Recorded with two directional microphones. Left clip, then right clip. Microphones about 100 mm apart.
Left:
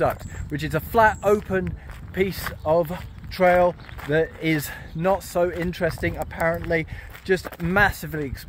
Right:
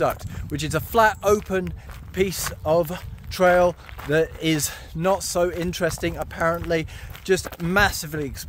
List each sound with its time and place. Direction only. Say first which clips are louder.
0.0 s speech: even; 25° right (ahead or behind)
1.0 s speech: left 1 dB; 10° right (ahead or behind)
2.1 s speech: right 1 dB; 30° right (ahead or behind)
4.6 s speech: even; 20° right (ahead or behind)
5.7 s speech: even; 35° right (ahead or behind)
7.4 s speech: left 2 dB; 20° right (ahead or behind)